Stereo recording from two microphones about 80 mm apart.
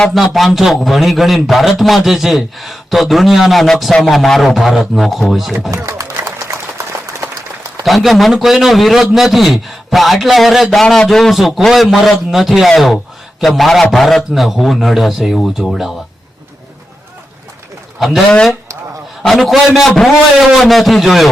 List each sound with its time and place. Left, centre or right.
0.0 s a man's voice: centre
6.0 s a sound: right
7.9 s a man's voice: centre
19.2 s a man's voice: centre